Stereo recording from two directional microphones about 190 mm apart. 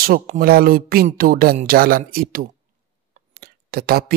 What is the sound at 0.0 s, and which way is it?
Speech, 50° right (ahead or behind).